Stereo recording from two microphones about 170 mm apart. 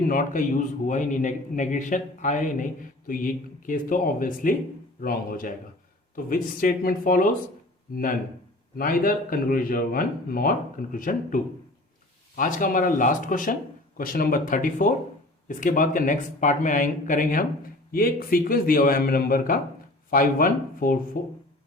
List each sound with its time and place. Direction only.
0.1 s a man's voice: 50° left (ahead or behind)
8.7 s a man's voice: 60° left (ahead or behind)
12.4 s a man's voice: 50° left (ahead or behind)